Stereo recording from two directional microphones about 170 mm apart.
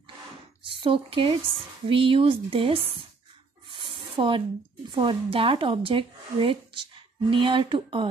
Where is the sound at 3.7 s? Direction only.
30° right (ahead or behind).